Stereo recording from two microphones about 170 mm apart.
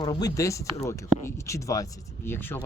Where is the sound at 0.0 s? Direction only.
25° left (ahead or behind).